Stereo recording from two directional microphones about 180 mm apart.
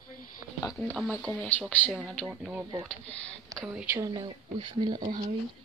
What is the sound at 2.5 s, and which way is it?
Speech, 15° right (ahead or behind).